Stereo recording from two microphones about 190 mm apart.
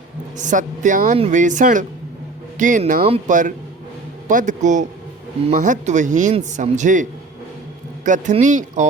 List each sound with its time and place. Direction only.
0.3 s speech: 40° right (ahead or behind)